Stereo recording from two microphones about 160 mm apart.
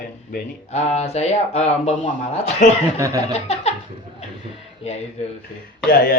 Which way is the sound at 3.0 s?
20° right (ahead or behind).